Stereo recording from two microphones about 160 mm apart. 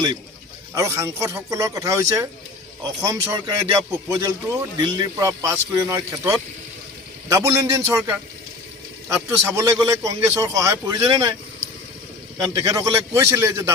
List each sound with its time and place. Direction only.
0.7 s a man's voice: 20° right (ahead or behind)
12.5 s a man's voice: 20° right (ahead or behind)